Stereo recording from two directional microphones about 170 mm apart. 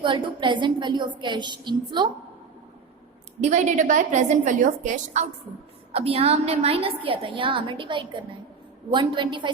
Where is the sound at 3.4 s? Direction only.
45° right (ahead or behind).